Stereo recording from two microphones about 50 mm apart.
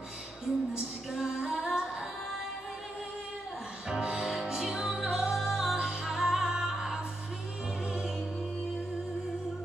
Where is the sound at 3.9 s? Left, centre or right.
Centre.